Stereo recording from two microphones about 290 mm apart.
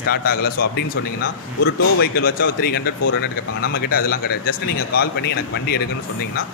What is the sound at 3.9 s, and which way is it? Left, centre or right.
A man's voice, left.